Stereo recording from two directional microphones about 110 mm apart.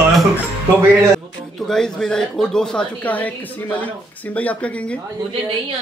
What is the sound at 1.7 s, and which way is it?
Speech, 5° left (ahead or behind).